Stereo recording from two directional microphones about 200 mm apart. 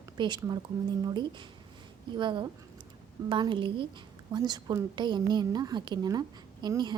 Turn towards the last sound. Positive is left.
turn(degrees=-20)  # may be behind; listen again after turning